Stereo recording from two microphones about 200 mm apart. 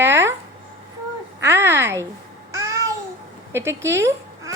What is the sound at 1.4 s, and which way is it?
Speech, 10° right (ahead or behind).